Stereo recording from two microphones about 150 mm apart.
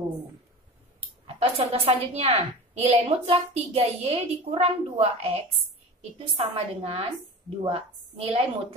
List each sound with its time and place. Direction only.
1.2 s a woman's voice: 40° right (ahead or behind)